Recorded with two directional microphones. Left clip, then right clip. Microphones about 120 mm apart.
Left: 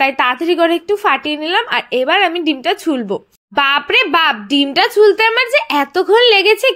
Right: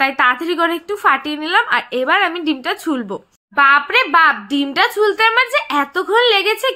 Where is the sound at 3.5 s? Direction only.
85° left; by 4.4 s 55° left (ahead or behind).